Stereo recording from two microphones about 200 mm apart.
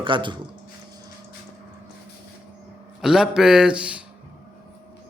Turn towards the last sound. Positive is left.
turn(degrees=-5)  # may be behind; listen again after turning